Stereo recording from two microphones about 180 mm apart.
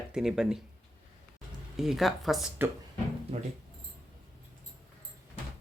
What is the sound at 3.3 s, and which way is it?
Speech, 40° right (ahead or behind).